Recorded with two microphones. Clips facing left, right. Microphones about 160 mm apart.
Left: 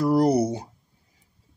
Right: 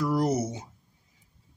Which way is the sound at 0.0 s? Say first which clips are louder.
Left 6 dB; 35° left (ahead or behind).